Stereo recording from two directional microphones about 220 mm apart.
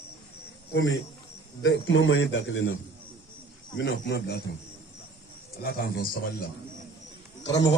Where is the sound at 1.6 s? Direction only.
55° left (ahead or behind).